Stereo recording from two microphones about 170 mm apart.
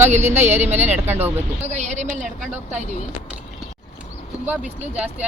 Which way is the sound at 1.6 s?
40° right (ahead or behind).